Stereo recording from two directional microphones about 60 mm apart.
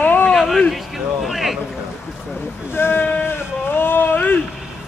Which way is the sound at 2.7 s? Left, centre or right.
Left.